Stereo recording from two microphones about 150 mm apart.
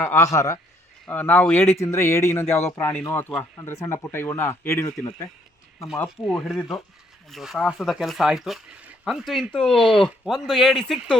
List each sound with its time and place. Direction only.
0.0 s a man's voice: 15° left (ahead or behind)
6.1 s speech: centre (ahead or behind)